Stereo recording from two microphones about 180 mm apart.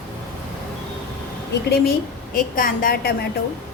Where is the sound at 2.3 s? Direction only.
50° left (ahead or behind).